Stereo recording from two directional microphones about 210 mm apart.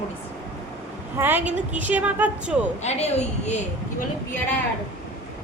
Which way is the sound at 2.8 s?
30° left (ahead or behind).